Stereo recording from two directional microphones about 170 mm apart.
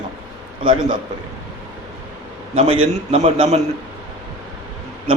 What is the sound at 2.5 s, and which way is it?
Speech, 35° right (ahead or behind).